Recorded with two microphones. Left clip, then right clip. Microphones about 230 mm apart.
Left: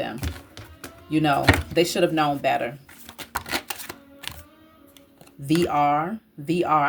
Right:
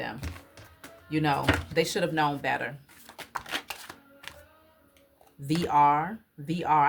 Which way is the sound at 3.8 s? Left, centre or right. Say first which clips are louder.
Left 8 dB; left.